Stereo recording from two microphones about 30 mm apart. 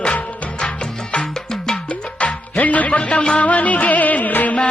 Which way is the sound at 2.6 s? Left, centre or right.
Left.